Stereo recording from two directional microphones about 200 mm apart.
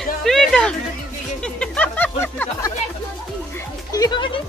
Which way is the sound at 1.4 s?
5° left (ahead or behind).